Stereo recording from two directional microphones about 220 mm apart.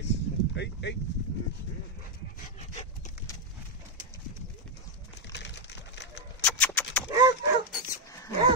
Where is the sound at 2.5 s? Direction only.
30° left (ahead or behind).